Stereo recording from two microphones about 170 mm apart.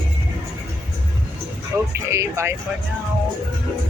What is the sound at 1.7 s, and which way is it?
Speech, 20° right (ahead or behind).